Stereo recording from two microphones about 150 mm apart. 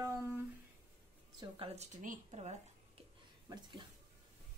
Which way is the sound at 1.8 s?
45° right (ahead or behind).